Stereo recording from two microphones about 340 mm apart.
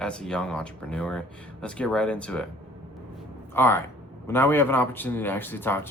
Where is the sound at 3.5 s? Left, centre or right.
Centre.